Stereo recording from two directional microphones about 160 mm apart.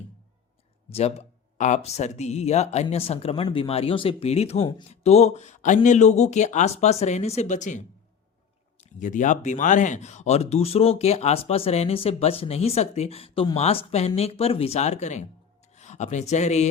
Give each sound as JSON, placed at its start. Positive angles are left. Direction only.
{"t": 0.9, "sound": "speech", "side_deg": 40}